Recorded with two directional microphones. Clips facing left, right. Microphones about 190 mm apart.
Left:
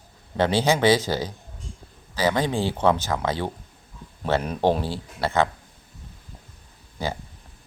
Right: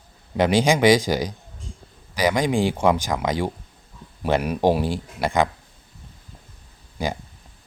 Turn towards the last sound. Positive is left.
turn(degrees=-15)  # may be behind; listen again after turning